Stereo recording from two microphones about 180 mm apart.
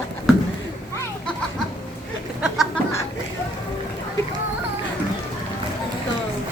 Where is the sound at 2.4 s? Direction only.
Centre (ahead or behind).